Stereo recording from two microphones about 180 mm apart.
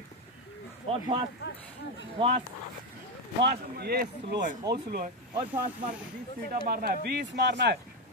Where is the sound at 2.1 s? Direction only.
35° right (ahead or behind).